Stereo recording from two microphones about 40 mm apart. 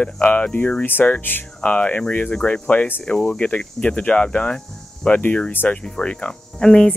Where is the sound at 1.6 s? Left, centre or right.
Left.